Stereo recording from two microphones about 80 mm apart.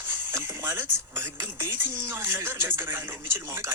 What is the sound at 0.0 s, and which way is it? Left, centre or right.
A man's voice, right.